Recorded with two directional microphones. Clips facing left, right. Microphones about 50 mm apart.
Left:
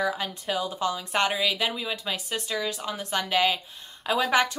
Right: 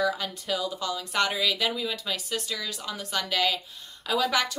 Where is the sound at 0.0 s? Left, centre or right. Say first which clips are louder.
Even; left.